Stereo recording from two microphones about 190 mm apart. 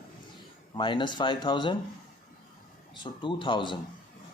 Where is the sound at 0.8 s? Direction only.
25° left (ahead or behind).